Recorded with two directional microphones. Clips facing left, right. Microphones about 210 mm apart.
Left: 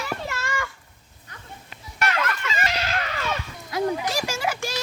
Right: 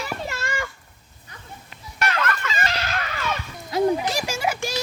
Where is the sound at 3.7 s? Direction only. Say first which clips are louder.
Right 4 dB; 25° right (ahead or behind).